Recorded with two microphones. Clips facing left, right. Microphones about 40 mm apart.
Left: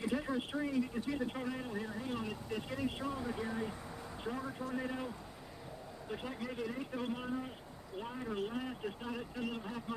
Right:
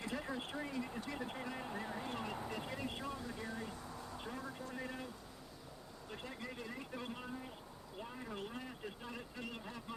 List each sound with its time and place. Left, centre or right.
0.0 s speech: centre
3.2 s speech: left
6.5 s speech: centre
9.0 s speech: centre